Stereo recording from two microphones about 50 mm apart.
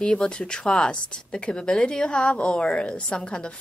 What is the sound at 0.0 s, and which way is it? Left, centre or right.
Speech, left.